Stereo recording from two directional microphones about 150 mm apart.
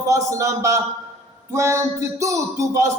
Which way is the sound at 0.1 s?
20° right (ahead or behind).